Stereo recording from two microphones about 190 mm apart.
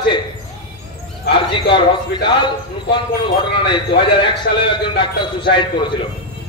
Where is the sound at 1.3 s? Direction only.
25° left (ahead or behind).